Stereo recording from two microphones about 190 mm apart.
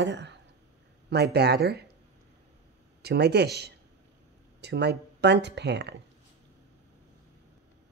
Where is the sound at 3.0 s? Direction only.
60° right (ahead or behind).